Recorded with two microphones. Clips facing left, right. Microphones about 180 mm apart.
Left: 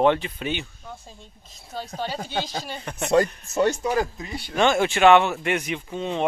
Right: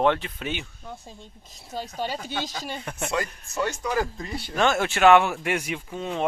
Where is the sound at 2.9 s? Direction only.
5° right (ahead or behind).